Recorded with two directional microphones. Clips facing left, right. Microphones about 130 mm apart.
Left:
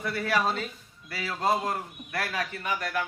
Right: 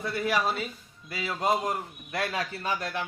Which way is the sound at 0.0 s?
20° right (ahead or behind).